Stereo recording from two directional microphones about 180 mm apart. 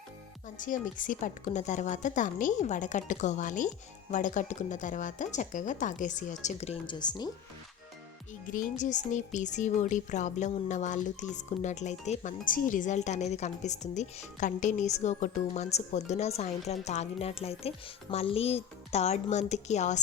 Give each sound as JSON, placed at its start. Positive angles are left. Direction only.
{"t": 0.4, "sound": "speech", "side_deg": 45}
{"t": 8.5, "sound": "speech", "side_deg": 45}